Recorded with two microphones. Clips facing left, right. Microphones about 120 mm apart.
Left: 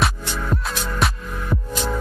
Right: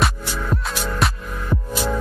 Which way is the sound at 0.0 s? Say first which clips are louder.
Even; centre (ahead or behind).